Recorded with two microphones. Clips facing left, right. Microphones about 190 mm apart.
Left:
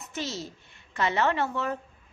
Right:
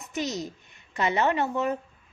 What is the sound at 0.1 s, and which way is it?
A child's voice, 15° right (ahead or behind).